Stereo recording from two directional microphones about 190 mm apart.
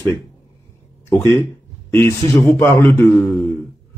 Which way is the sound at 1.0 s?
15° left (ahead or behind).